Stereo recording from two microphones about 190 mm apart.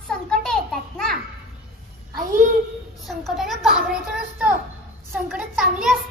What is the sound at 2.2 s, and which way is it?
Speech, 45° right (ahead or behind).